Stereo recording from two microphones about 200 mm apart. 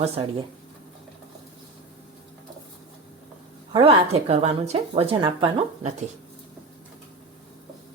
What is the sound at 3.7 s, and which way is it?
Speech, 30° right (ahead or behind).